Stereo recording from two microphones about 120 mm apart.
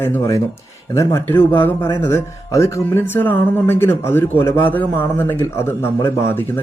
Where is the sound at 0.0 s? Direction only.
15° left (ahead or behind).